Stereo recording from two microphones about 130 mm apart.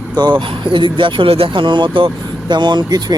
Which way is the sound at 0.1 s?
35° right (ahead or behind).